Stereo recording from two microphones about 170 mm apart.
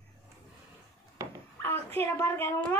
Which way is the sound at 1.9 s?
10° left (ahead or behind).